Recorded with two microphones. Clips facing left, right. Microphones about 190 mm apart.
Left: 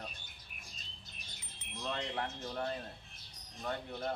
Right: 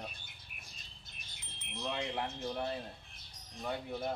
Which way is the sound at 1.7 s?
10° right (ahead or behind).